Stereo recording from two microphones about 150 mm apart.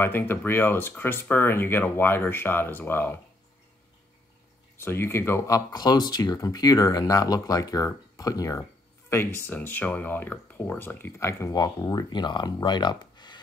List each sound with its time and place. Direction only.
0.0 s speech: 15° left (ahead or behind)
4.7 s speech: 15° left (ahead or behind)